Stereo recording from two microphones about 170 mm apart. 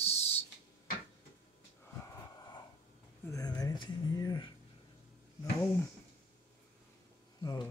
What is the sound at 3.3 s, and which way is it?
Speech, 20° left (ahead or behind).